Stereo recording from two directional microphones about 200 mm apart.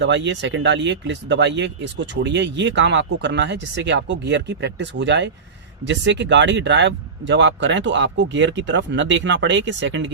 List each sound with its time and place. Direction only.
0.0 s speech: 65° right (ahead or behind)